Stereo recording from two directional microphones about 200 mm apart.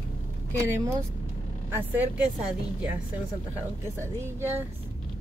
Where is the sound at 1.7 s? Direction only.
10° right (ahead or behind).